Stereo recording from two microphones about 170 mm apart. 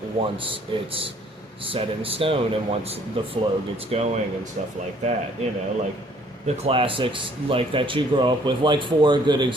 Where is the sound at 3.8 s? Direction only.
35° right (ahead or behind).